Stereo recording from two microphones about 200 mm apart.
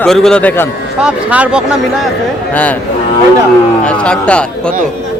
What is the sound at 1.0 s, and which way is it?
Speech, 5° right (ahead or behind).